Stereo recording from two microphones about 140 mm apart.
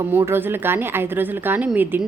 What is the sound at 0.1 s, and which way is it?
A woman's voice, 15° right (ahead or behind).